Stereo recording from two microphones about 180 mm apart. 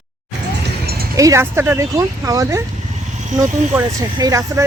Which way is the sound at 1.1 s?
15° right (ahead or behind).